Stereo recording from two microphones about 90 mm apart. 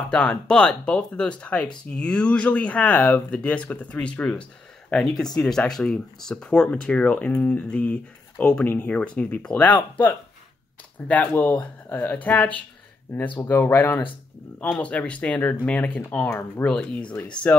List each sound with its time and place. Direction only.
0.1 s speech: 10° left (ahead or behind); by 14.0 s 25° left (ahead or behind)
14.8 s speech: 15° left (ahead or behind)
16.6 s speech: 10° left (ahead or behind)